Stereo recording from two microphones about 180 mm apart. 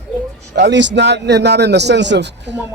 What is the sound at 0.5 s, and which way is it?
Speech, 75° right (ahead or behind).